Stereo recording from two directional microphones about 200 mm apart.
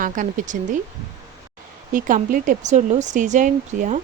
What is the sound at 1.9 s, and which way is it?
Speech, 40° right (ahead or behind).